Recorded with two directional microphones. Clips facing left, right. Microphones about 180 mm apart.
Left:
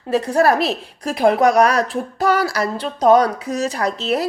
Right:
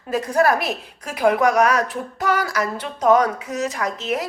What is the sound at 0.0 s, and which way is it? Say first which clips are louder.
A woman's voice: left 3 dB; 30° left (ahead or behind).